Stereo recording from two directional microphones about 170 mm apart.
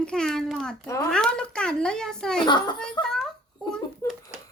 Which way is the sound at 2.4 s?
25° left (ahead or behind).